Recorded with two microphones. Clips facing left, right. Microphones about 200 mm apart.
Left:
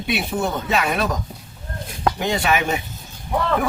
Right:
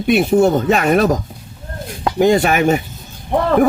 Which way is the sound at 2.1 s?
45° right (ahead or behind).